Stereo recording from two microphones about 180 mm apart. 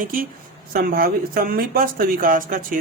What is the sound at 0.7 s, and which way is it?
Speech, 55° right (ahead or behind).